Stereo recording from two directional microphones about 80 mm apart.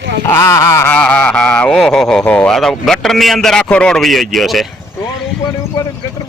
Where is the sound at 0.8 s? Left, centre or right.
Centre.